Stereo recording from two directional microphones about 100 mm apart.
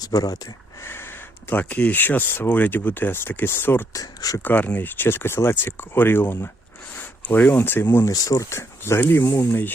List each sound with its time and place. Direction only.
0.0 s speech: 40° left (ahead or behind)
0.8 s speech: 25° left (ahead or behind)
3.9 s speech: 35° left (ahead or behind)
4.4 s speech: 15° left (ahead or behind)
8.1 s speech: 35° left (ahead or behind)